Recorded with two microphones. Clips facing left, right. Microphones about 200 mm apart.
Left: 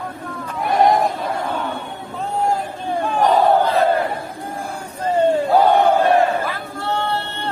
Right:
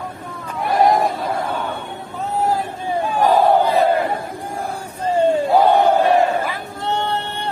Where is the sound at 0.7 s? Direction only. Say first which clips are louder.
Even; centre (ahead or behind).